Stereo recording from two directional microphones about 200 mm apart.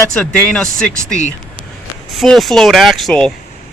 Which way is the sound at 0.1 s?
5° left (ahead or behind).